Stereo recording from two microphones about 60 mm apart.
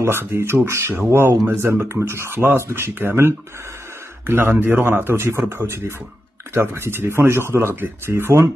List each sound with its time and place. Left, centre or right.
0.0 s speech: right